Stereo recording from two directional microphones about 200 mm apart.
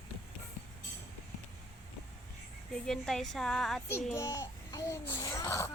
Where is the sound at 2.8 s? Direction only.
5° left (ahead or behind).